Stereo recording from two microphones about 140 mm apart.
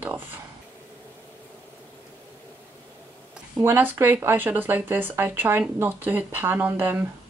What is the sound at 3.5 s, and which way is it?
Speech, 15° right (ahead or behind).